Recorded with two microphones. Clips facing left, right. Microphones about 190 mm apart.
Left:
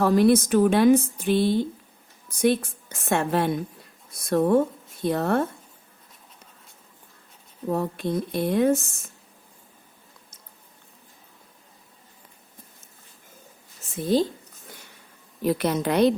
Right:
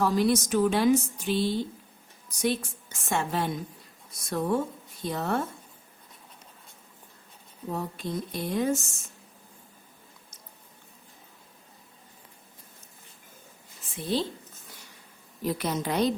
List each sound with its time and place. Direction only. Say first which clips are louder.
0.0 s speech: left 6 dB; 55° left (ahead or behind)
7.7 s speech: left 7 dB; 60° left (ahead or behind)
13.9 s speech: left 7 dB; 45° left (ahead or behind)
15.4 s speech: left 6 dB; 65° left (ahead or behind)